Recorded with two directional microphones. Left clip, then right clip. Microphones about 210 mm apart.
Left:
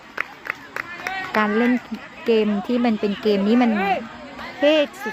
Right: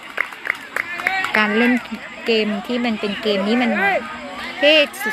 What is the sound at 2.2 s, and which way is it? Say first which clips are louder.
Speech: even; 25° left (ahead or behind).